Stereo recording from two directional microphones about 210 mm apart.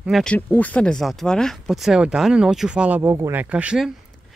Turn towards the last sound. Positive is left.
turn(degrees=-5)  # may be behind; listen again after turning